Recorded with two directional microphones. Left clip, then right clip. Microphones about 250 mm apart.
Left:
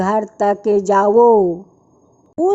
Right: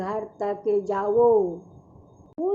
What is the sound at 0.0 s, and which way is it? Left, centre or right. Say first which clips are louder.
Speech: left 12 dB; left.